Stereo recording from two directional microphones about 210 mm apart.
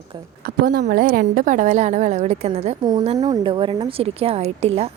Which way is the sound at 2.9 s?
20° right (ahead or behind).